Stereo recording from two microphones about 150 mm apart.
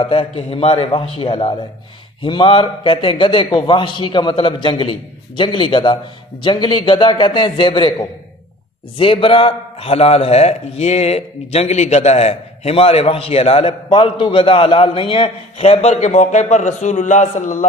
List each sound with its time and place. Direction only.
0.0 s a man's voice: 35° left (ahead or behind); by 17.6 s 55° left (ahead or behind)